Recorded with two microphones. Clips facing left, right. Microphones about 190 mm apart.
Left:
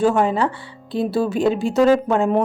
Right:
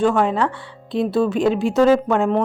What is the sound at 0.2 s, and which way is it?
Speech, centre (ahead or behind).